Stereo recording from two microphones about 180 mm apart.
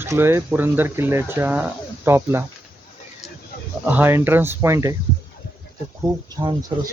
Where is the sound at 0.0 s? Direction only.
15° right (ahead or behind).